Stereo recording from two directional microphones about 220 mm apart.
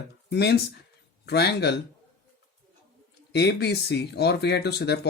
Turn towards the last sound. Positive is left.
turn(degrees=50)  # may be behind; listen again after turning